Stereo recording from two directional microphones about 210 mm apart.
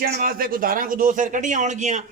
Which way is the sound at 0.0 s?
45° right (ahead or behind).